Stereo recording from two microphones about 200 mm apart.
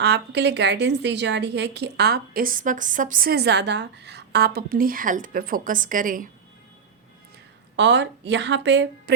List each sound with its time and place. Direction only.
0.0 s a woman's voice: 60° right (ahead or behind); by 6.3 s 40° right (ahead or behind)
7.8 s speech: 60° right (ahead or behind)